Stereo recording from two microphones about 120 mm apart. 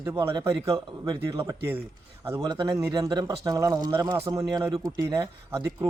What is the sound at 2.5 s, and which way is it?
A man's voice, 35° right (ahead or behind).